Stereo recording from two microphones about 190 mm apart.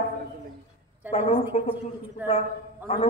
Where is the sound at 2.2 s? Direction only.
10° right (ahead or behind).